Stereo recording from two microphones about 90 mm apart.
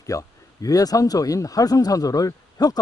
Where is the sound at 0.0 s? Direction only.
40° left (ahead or behind).